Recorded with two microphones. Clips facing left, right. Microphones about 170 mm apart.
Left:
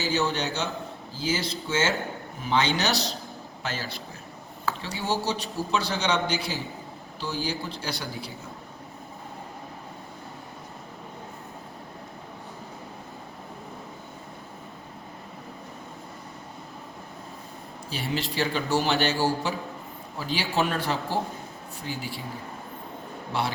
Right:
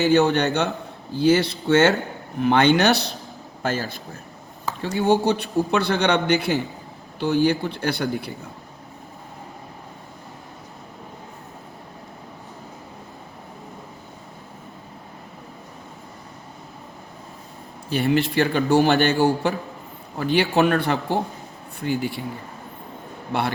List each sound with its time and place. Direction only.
0.0 s a man's voice: 60° right (ahead or behind)
3.6 s a man's voice: 50° right (ahead or behind)
17.8 s a man's voice: 60° right (ahead or behind)
23.3 s a man's voice: 60° right (ahead or behind)